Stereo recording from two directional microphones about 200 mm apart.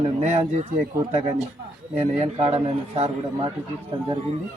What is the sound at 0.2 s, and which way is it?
Speech, 35° right (ahead or behind).